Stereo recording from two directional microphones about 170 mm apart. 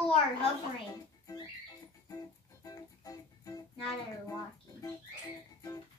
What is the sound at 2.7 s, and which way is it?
Music, 20° left (ahead or behind).